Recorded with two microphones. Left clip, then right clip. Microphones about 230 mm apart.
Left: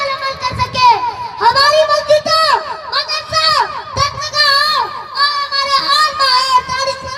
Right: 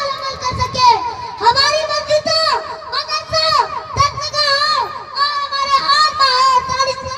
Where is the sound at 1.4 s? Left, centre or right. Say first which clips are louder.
Left 3 dB; left.